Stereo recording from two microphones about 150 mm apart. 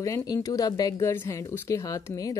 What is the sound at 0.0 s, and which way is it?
Speech, 25° left (ahead or behind).